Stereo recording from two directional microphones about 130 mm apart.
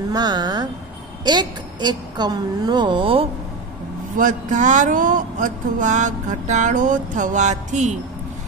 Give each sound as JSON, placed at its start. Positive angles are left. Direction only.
{"t": 0.1, "sound": "a woman's voice", "side_deg": -30}
{"t": 4.2, "sound": "speech", "side_deg": -70}